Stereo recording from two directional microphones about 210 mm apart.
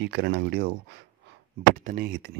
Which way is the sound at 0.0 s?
50° right (ahead or behind).